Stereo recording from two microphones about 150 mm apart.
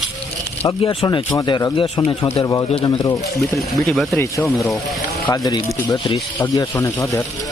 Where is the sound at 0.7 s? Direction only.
30° left (ahead or behind).